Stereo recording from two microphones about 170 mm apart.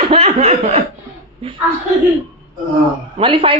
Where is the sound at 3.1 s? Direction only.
30° right (ahead or behind).